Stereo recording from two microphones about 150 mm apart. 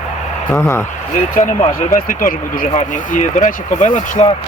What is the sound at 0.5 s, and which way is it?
Speech, 20° left (ahead or behind).